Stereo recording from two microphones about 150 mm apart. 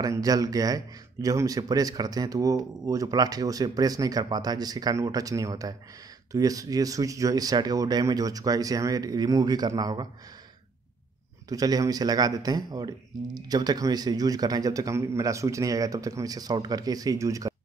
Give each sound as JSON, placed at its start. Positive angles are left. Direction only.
{"t": 0.0, "sound": "a man's voice", "side_deg": -25}
{"t": 11.4, "sound": "a man's voice", "side_deg": -25}